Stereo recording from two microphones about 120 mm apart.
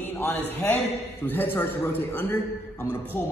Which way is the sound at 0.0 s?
15° left (ahead or behind).